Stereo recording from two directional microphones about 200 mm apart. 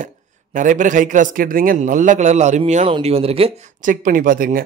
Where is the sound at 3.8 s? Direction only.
40° right (ahead or behind).